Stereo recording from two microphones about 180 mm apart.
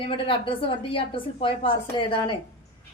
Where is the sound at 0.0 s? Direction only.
30° left (ahead or behind).